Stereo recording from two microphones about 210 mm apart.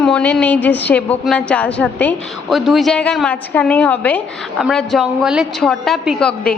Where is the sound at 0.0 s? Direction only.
5° left (ahead or behind).